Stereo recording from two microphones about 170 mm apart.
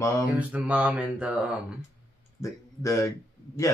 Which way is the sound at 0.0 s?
20° left (ahead or behind).